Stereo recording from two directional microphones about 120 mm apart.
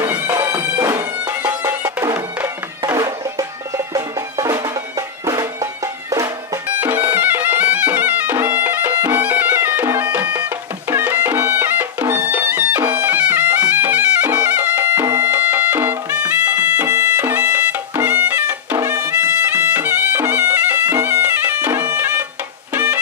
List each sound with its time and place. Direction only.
0.0 s bagpipes: 15° right (ahead or behind)
0.7 s music: 30° right (ahead or behind)
1.6 s music: 15° right (ahead or behind)
6.8 s music: 15° right (ahead or behind)